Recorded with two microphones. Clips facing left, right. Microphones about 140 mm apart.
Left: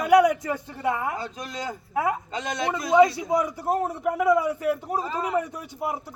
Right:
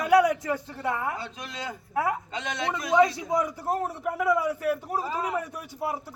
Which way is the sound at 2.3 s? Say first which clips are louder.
Left 3 dB; 40° left (ahead or behind).